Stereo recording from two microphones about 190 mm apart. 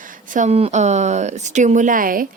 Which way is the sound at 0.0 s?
45° right (ahead or behind).